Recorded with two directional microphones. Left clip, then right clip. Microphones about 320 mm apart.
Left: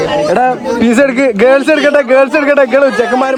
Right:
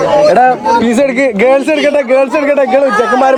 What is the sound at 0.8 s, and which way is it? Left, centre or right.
Speech, left.